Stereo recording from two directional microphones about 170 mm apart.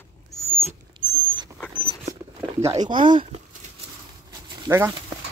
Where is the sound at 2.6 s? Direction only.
35° right (ahead or behind).